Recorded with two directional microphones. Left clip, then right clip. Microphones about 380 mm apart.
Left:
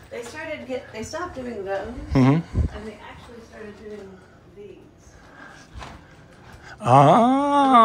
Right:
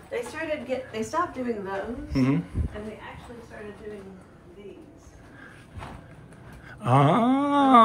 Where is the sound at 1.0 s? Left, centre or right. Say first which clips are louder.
Right 2 dB; right.